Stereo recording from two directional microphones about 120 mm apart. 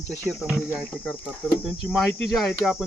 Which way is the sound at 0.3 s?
5° right (ahead or behind).